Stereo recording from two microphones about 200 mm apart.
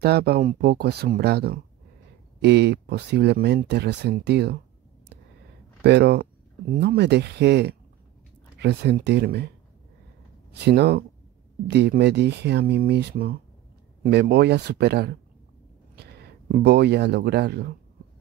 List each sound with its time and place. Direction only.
0.0 s speech: 50° right (ahead or behind)
5.9 s speech: 55° right (ahead or behind)
10.5 s speech: 55° right (ahead or behind)